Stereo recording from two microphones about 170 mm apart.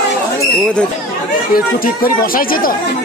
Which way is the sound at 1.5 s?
60° left (ahead or behind).